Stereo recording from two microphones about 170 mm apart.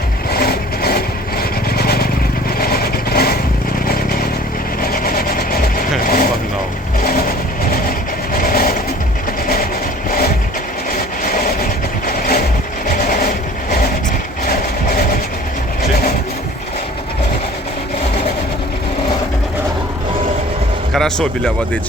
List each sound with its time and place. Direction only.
0.3 s vehicle: 65° left (ahead or behind)
4.8 s vehicle: 60° left (ahead or behind)
11.3 s vehicle: 60° left (ahead or behind)
20.9 s speech: 5° left (ahead or behind)